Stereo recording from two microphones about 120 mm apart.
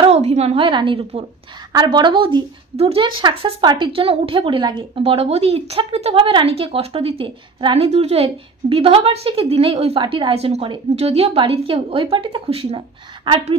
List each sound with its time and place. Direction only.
0.1 s a woman's voice: 65° right (ahead or behind); by 13.4 s 45° right (ahead or behind)